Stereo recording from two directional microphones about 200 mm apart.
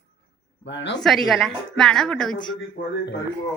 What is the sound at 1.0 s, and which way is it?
A woman's voice, centre (ahead or behind).